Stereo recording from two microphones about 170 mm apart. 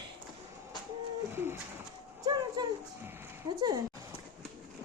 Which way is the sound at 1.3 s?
15° right (ahead or behind).